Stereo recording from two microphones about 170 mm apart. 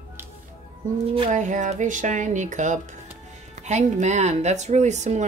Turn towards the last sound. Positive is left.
turn(degrees=-45)  # may be behind; listen again after turning